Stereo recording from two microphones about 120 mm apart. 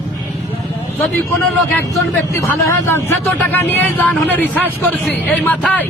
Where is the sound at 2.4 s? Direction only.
25° left (ahead or behind).